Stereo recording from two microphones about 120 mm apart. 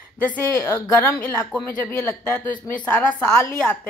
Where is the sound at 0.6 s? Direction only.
20° left (ahead or behind).